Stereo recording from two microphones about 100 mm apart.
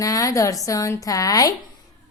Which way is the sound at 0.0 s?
35° left (ahead or behind).